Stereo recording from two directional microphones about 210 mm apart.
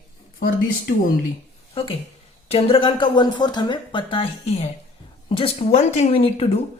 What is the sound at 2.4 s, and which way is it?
A woman's voice, 25° left (ahead or behind).